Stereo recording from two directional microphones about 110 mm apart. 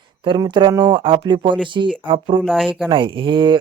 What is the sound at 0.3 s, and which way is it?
Speech, 45° right (ahead or behind).